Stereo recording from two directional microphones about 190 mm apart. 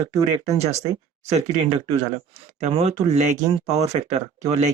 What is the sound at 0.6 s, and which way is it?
Speech, 35° right (ahead or behind).